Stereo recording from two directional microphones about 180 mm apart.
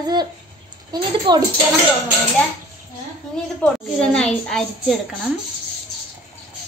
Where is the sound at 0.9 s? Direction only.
25° right (ahead or behind).